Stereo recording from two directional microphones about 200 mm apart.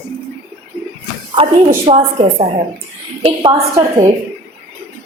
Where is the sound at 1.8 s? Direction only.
35° right (ahead or behind).